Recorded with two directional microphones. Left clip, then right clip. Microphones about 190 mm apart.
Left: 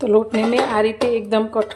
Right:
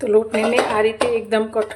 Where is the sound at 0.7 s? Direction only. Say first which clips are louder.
Even; 30° left (ahead or behind).